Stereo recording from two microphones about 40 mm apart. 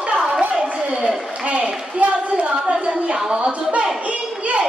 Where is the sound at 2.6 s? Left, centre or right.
Right.